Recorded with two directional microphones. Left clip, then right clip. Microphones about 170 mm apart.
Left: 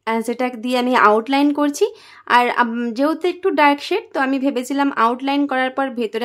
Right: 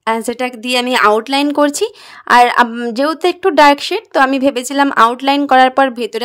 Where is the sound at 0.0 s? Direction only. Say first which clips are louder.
Right 4 dB; 35° right (ahead or behind).